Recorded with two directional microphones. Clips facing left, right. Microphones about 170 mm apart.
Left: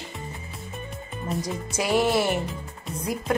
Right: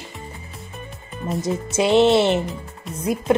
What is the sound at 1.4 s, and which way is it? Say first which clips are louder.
Speech: right 11 dB; 25° right (ahead or behind).